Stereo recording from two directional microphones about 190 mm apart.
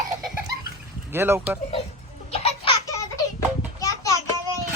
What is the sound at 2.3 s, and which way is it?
Baby laughter, 30° left (ahead or behind).